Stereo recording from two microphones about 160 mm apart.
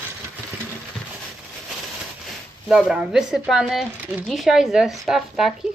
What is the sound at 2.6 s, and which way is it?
Speech, 5° right (ahead or behind).